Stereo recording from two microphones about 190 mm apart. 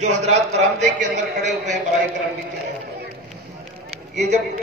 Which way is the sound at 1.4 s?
40° right (ahead or behind).